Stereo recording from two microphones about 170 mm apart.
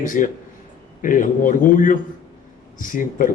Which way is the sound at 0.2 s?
50° left (ahead or behind).